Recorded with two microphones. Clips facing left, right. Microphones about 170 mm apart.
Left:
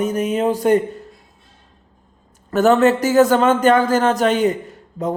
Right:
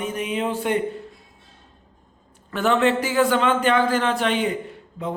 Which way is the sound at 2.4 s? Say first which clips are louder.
Left 6 dB; 40° left (ahead or behind).